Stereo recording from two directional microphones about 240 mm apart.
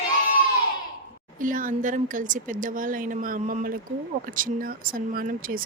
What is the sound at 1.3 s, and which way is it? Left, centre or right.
Speech, right.